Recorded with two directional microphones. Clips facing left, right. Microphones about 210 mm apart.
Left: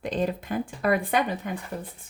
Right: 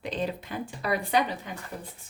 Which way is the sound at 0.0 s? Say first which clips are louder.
Left 4 dB; 45° left (ahead or behind).